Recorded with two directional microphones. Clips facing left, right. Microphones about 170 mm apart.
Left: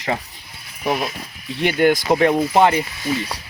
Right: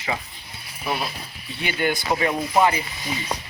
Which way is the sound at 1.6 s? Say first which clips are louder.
Left 8 dB; 65° left (ahead or behind).